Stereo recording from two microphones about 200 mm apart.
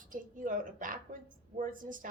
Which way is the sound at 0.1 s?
40° right (ahead or behind).